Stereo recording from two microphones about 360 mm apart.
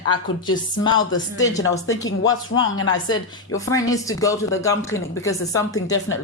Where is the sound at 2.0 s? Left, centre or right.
Left.